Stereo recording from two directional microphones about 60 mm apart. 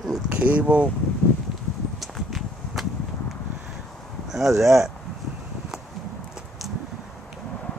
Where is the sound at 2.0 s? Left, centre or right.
Centre.